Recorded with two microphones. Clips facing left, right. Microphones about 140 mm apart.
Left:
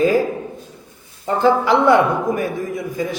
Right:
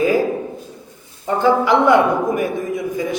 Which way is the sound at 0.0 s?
15° right (ahead or behind).